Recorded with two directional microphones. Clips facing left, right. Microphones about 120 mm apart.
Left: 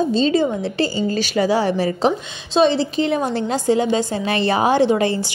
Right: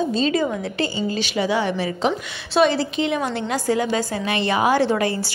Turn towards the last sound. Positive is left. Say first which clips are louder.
# left 4 dB
turn(degrees=25)  # may be behind; listen again after turning